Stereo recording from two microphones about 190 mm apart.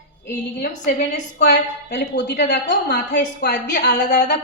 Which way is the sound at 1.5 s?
65° left (ahead or behind).